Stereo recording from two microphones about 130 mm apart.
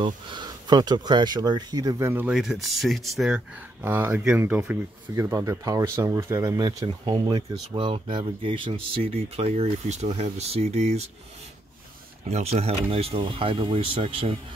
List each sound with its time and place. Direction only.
0.0 s speech: 35° right (ahead or behind); by 2.3 s 15° right (ahead or behind)
2.3 s speech: 5° right (ahead or behind); by 7.2 s 30° right (ahead or behind)
7.2 s speech: 45° right (ahead or behind)
12.3 s speech: 55° right (ahead or behind)